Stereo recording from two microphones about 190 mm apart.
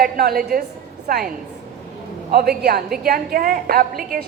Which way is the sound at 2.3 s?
55° right (ahead or behind).